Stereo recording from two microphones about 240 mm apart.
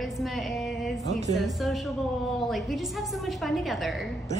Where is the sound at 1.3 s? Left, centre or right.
Centre.